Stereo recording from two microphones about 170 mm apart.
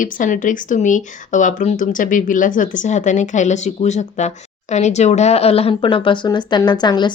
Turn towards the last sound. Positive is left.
turn(degrees=25)  # may be behind; listen again after turning